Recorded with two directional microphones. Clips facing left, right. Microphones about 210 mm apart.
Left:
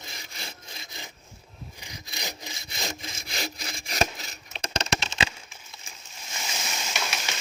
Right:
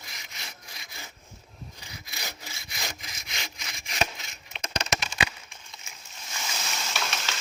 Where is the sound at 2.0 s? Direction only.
20° left (ahead or behind).